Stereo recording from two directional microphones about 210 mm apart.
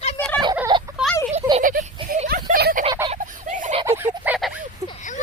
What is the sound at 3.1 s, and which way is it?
Fowl, 35° right (ahead or behind).